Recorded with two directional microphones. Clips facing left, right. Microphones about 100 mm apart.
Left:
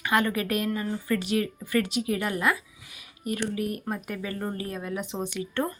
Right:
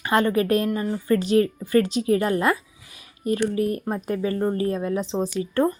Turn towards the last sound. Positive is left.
turn(degrees=-35)  # may be behind; listen again after turning